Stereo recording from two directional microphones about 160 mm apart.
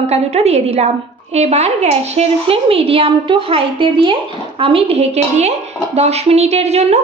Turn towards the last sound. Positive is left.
turn(degrees=-40)  # may be behind; listen again after turning